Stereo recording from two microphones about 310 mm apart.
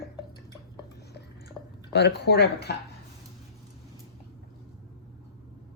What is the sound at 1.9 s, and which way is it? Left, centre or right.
Speech, left.